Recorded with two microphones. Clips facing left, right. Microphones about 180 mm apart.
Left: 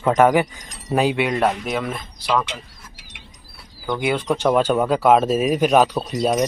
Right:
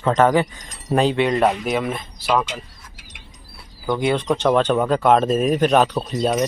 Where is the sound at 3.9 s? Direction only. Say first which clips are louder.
Right 2 dB; 5° left (ahead or behind).